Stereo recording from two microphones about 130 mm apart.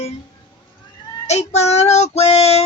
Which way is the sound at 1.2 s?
60° left (ahead or behind).